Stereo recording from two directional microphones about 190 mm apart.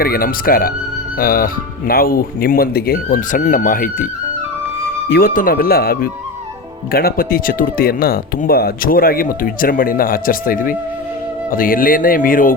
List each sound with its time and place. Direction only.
0.0 s speech: 50° left (ahead or behind)